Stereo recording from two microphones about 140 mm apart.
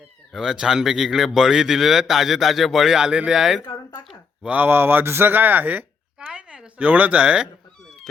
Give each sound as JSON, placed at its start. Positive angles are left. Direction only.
{"t": 0.3, "sound": "speech", "side_deg": -5}